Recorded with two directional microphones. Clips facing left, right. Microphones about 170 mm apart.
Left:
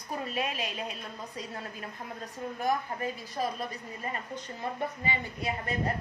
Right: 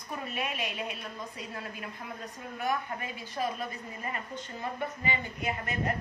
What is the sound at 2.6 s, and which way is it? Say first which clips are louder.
Speech: left 2 dB; 40° left (ahead or behind).